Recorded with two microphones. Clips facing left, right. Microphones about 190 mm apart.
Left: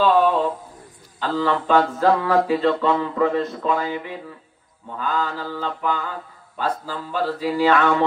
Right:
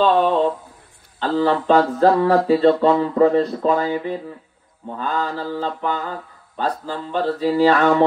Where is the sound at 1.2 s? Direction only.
40° right (ahead or behind).